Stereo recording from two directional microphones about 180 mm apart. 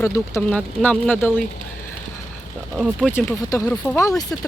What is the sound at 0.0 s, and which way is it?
Speech, 15° left (ahead or behind).